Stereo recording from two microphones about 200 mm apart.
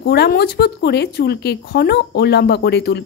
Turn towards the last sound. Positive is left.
turn(degrees=60)  # may be behind; listen again after turning